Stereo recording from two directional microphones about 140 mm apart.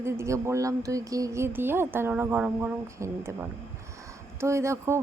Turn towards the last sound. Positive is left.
turn(degrees=-20)  # may be behind; listen again after turning